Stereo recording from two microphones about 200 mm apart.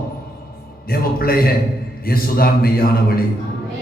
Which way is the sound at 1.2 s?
50° left (ahead or behind).